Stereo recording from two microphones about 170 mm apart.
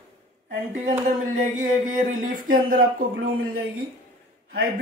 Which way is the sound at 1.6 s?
50° right (ahead or behind).